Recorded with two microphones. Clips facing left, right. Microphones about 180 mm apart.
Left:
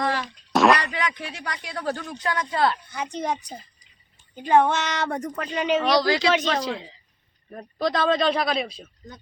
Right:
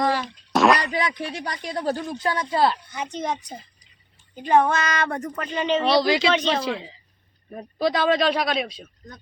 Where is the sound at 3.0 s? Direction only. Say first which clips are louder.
Even; 10° left (ahead or behind).